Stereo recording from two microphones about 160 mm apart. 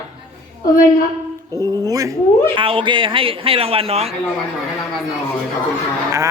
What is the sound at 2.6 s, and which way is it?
A man's voice, 35° right (ahead or behind).